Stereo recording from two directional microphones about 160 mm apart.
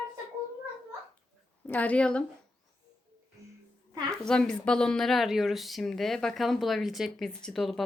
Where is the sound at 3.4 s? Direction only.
20° right (ahead or behind).